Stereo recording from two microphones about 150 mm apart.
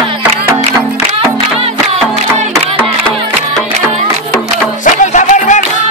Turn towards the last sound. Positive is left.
turn(degrees=55)  # may be behind; listen again after turning